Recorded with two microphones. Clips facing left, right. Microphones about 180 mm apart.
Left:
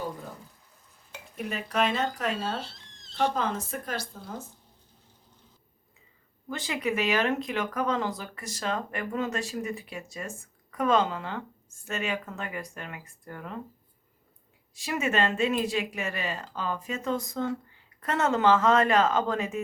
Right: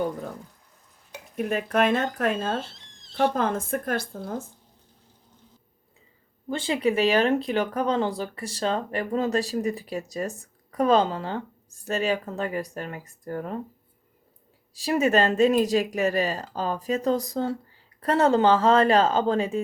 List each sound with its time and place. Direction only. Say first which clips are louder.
1.4 s speech: right 5 dB; 50° right (ahead or behind)
6.5 s speech: right 6 dB; 30° right (ahead or behind)
14.7 s speech: right 7 dB; 35° right (ahead or behind)